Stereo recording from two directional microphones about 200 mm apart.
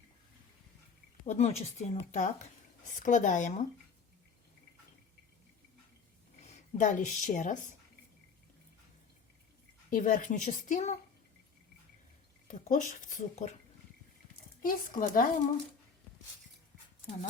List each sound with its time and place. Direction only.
1.2 s speech: 30° left (ahead or behind)
6.4 s a woman's voice: 35° left (ahead or behind)
9.9 s speech: 40° left (ahead or behind)
12.5 s speech: 40° left (ahead or behind)
14.6 s speech: 45° left (ahead or behind)